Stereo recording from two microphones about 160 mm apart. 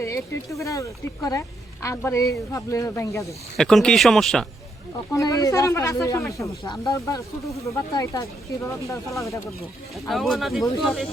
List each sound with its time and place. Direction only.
0.0 s speech: 20° left (ahead or behind)
3.6 s speech: 5° left (ahead or behind)
5.1 s speech: 20° left (ahead or behind)
10.1 s speech: centre (ahead or behind)